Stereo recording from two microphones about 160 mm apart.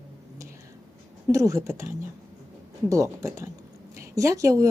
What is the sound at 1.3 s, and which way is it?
Speech, 20° right (ahead or behind).